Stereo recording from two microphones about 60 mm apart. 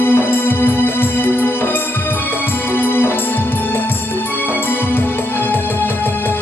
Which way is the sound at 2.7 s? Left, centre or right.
Left.